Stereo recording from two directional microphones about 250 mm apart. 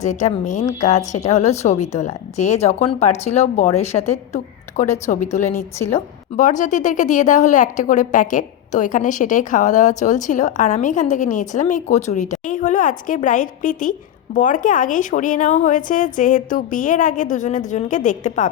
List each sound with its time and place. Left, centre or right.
0.0 s speech: left
5.4 s a woman's voice: centre
6.3 s speech: left